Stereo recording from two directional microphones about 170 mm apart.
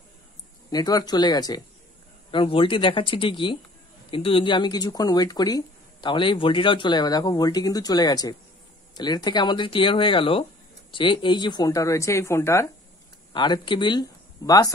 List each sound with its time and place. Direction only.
0.7 s speech: 25° left (ahead or behind)
13.3 s speech: 25° left (ahead or behind)